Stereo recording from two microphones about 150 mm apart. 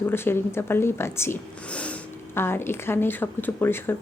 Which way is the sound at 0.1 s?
15° left (ahead or behind).